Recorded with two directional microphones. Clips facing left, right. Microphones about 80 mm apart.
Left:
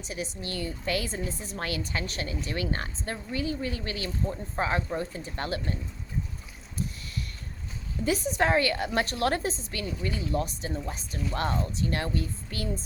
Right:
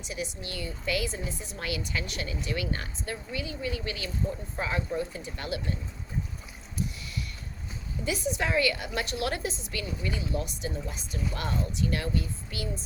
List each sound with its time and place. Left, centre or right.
0.0 s a woman's voice: left
8.0 s a woman's voice: left